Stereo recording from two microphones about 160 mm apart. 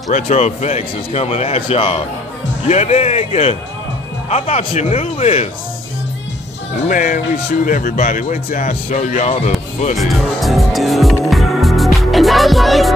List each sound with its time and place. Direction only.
0.1 s speech: 45° left (ahead or behind)
6.9 s speech: 60° left (ahead or behind)
9.9 s speech: centre (ahead or behind)
11.2 s music: centre (ahead or behind)